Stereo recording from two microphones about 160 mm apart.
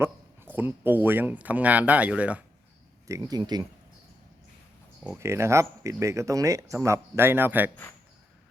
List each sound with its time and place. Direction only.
0.0 s speech: 10° right (ahead or behind)
3.1 s speech: 20° right (ahead or behind)
5.1 s speech: 15° right (ahead or behind)